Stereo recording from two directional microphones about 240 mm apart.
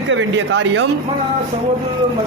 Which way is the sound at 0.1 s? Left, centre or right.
Right.